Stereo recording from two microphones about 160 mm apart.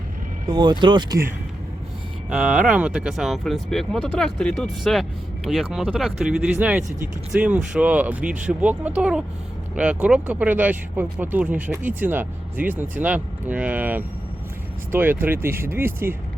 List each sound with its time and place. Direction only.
0.4 s speech: 25° right (ahead or behind)
2.3 s speech: 10° right (ahead or behind)